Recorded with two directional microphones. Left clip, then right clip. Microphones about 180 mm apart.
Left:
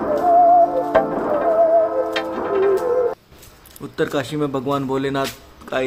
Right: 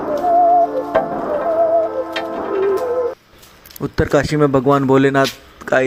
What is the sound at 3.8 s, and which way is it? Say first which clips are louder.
Speech: right 6 dB; 30° right (ahead or behind).